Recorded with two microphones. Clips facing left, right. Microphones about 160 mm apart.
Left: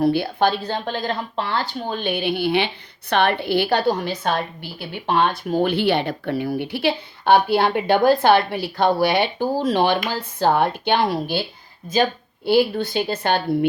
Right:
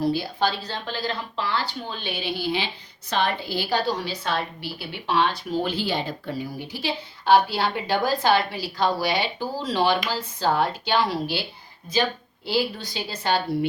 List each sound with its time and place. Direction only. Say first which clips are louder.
0.0 s a woman's voice: left 5 dB; 60° left (ahead or behind)
12.5 s a woman's voice: left 8 dB; 55° left (ahead or behind)